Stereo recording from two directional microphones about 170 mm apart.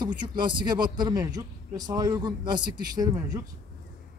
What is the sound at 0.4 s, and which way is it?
Speech, 30° right (ahead or behind).